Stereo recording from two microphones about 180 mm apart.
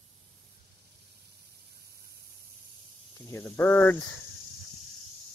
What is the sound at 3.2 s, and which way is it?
Speech, 15° left (ahead or behind).